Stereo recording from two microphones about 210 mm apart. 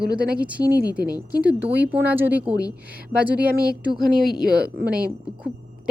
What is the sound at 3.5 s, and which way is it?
Speech, 45° right (ahead or behind).